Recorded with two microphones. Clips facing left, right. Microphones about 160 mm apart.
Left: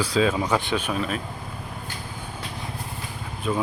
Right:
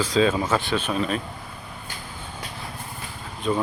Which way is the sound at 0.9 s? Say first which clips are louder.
Right 2 dB; centre (ahead or behind).